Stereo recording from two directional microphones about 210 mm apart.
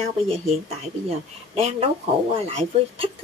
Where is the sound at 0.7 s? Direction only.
30° right (ahead or behind).